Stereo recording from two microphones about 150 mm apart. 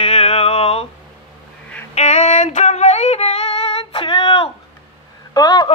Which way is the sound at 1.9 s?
45° left (ahead or behind).